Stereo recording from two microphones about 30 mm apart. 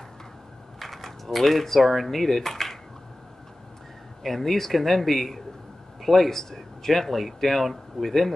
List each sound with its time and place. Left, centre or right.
0.7 s speech: centre
4.2 s speech: centre